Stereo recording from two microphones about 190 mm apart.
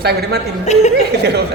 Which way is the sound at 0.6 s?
35° left (ahead or behind).